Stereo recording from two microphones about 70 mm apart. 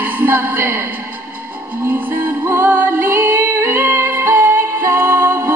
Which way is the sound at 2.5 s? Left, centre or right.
Right.